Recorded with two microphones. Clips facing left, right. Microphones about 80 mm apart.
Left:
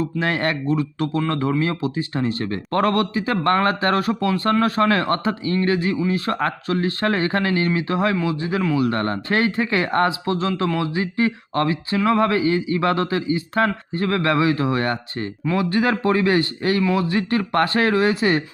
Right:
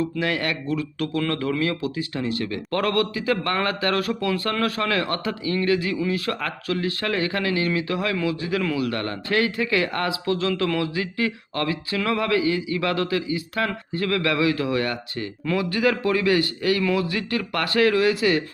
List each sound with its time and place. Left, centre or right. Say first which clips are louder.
0.0 s speech: left 3 dB; left